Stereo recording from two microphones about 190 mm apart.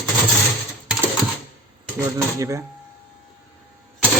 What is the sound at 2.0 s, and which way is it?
Speech, 15° right (ahead or behind).